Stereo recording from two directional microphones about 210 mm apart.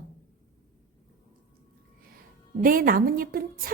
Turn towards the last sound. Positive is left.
turn(degrees=-45)  # may be behind; listen again after turning